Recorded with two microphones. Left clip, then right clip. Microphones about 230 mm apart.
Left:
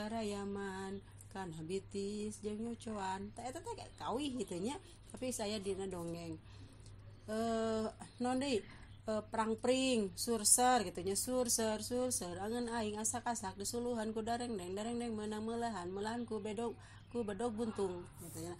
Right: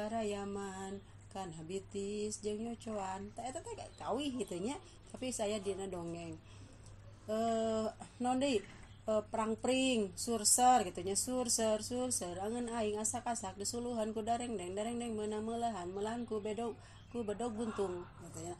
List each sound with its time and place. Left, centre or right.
0.0 s music: left
1.3 s speech: left
7.2 s speech: left